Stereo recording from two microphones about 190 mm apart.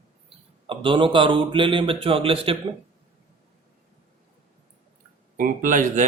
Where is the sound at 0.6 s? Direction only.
25° right (ahead or behind).